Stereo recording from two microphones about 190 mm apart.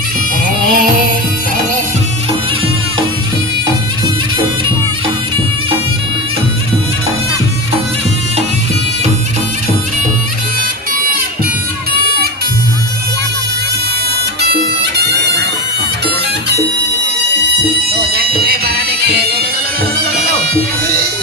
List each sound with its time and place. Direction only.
0.4 s music: 45° right (ahead or behind)
14.5 s bagpipes: 60° right (ahead or behind)
17.9 s music: 55° right (ahead or behind)
20.4 s bagpipes: 55° right (ahead or behind)